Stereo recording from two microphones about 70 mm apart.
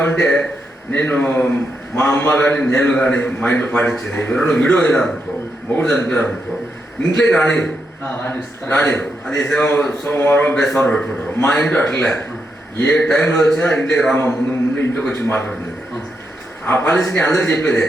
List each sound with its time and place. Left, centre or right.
0.0 s a man's voice: left
15.1 s a man's voice: left
16.6 s a man's voice: left